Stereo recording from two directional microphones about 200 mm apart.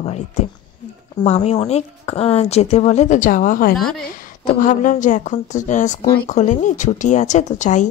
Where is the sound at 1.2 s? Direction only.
35° left (ahead or behind).